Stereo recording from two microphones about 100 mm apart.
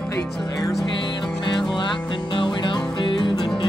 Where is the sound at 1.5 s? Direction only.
50° left (ahead or behind).